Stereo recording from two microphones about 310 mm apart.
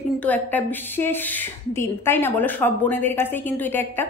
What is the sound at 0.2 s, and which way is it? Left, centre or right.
Speech, centre.